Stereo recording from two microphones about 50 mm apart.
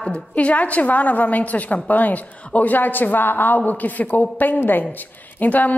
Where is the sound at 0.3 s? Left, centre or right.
Left.